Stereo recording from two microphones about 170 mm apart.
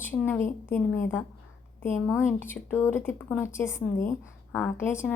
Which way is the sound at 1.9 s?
5° right (ahead or behind).